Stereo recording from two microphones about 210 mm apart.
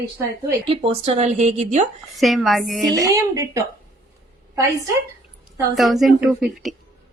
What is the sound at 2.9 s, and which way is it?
Speech, 15° right (ahead or behind).